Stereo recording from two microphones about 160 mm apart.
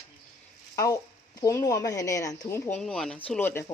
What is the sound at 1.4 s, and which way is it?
Speech, 25° left (ahead or behind).